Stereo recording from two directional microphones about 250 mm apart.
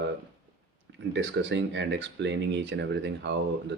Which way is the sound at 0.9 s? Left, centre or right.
Right.